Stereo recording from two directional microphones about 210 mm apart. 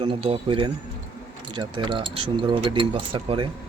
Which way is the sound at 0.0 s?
25° right (ahead or behind).